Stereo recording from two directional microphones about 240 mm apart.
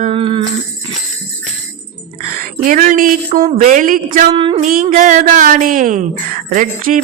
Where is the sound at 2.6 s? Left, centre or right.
Right.